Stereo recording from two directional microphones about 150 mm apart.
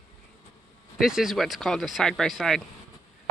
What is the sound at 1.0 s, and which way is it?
Speech, centre (ahead or behind).